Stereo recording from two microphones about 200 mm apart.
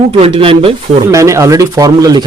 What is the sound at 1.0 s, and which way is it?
Speech, 15° right (ahead or behind).